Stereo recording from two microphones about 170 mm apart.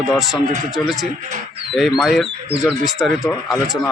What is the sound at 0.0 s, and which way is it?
Speech, centre (ahead or behind).